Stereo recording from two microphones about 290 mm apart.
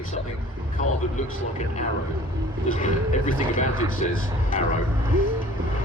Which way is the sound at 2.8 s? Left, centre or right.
Left.